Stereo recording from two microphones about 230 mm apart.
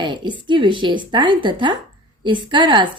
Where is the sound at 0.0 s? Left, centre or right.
Centre.